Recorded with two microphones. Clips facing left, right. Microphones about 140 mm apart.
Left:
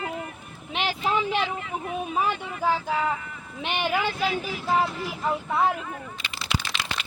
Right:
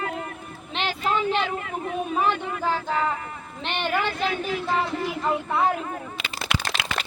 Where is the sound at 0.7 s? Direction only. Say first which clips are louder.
Even; 10° left (ahead or behind).